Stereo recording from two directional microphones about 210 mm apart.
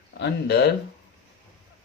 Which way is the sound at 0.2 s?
55° left (ahead or behind).